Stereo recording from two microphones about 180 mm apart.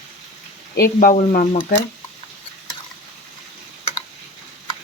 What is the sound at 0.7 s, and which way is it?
Speech, 55° left (ahead or behind).